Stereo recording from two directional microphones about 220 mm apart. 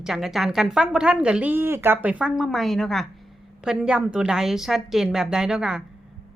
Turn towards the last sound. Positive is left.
turn(degrees=-5)  # may be behind; listen again after turning